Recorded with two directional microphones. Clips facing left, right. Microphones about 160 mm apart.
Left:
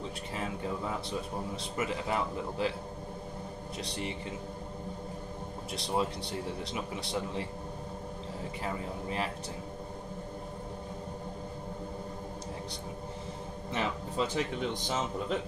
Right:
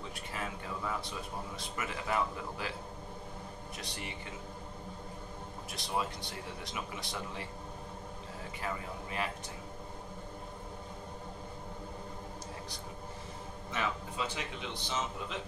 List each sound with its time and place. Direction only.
1.8 s speech: 25° left (ahead or behind)
3.8 s speech: 30° left (ahead or behind)
5.8 s speech: 30° left (ahead or behind)
13.7 s speech: 40° left (ahead or behind)